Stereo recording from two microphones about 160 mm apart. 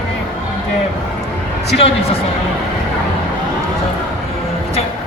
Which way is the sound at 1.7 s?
35° left (ahead or behind).